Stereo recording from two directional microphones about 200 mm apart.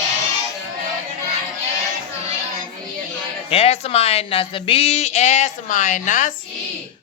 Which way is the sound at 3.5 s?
30° left (ahead or behind).